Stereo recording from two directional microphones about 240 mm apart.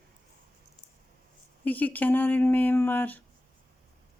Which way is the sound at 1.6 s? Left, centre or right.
Centre.